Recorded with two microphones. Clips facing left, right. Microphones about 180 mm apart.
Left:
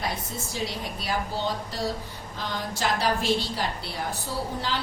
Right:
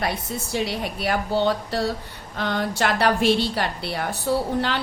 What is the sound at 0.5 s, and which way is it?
A woman's voice, 65° right (ahead or behind).